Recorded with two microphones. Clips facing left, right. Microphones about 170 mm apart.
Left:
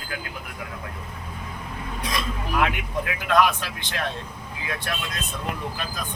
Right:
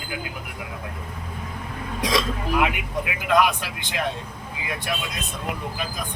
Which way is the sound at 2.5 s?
10° right (ahead or behind).